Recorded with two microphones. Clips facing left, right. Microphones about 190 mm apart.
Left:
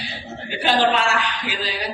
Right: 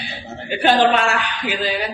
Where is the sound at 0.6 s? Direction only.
55° right (ahead or behind).